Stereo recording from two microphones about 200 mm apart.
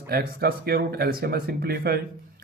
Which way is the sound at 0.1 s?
50° right (ahead or behind).